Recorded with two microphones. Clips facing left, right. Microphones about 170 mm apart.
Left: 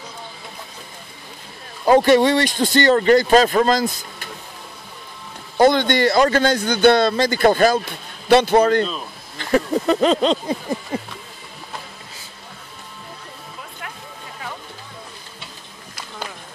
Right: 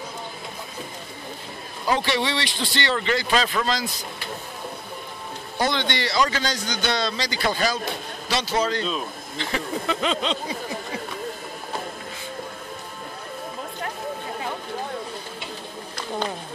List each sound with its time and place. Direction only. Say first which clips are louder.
1.9 s speech: left 11 dB; 50° left (ahead or behind)
5.6 s a man's voice: left 10 dB; 50° left (ahead or behind)
9.4 s speech: left 9 dB; 45° left (ahead or behind)